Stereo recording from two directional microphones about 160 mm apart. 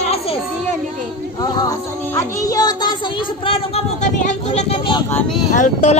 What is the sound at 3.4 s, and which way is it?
Speech, 35° left (ahead or behind).